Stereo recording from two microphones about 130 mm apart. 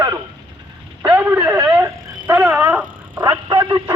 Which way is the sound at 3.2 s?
30° right (ahead or behind).